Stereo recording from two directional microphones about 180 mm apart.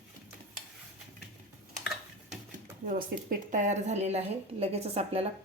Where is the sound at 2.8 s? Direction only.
45° right (ahead or behind).